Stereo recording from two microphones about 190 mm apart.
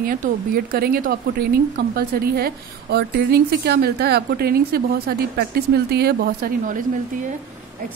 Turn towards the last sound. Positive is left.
turn(degrees=-55)  # may be behind; listen again after turning